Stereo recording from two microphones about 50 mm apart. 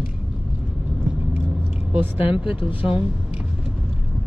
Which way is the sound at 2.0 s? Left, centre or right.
Right.